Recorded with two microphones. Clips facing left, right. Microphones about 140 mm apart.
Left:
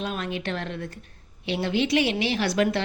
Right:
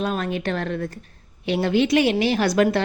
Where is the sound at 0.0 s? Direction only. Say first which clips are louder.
Right 5 dB; 45° right (ahead or behind).